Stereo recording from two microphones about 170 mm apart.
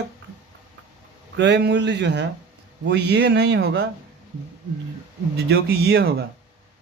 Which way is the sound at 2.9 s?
80° right.